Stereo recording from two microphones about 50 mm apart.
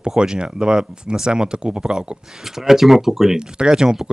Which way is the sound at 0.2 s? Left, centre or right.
Centre.